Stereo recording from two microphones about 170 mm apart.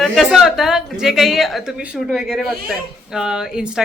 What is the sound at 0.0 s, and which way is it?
Speech, centre (ahead or behind).